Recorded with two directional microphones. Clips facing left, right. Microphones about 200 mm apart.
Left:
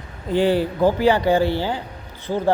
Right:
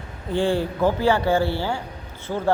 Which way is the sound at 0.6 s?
15° left (ahead or behind).